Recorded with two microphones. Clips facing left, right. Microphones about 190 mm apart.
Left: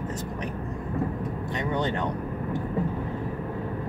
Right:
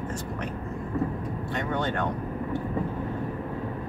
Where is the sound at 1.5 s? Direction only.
15° left (ahead or behind).